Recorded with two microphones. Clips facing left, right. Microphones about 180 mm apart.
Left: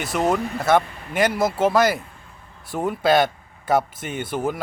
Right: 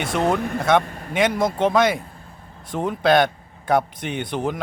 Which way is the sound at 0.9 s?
45° right (ahead or behind).